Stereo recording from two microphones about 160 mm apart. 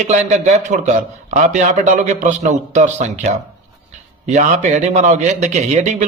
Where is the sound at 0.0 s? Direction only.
45° right (ahead or behind).